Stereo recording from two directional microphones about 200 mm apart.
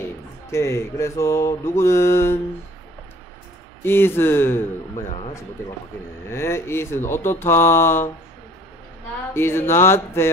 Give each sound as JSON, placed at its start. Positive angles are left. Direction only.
{"t": 0.5, "sound": "mantra", "side_deg": 15}
{"t": 3.8, "sound": "mantra", "side_deg": 10}
{"t": 6.3, "sound": "mantra", "side_deg": 15}
{"t": 9.3, "sound": "mantra", "side_deg": 10}